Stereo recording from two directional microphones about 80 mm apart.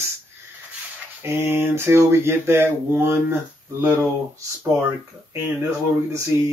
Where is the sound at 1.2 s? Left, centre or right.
Right.